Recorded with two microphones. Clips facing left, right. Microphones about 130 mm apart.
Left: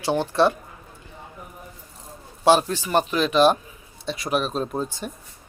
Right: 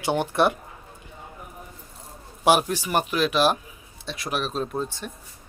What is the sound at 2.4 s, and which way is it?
A man's voice, 10° right (ahead or behind).